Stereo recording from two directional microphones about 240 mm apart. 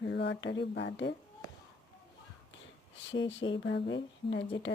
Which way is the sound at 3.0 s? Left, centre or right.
Left.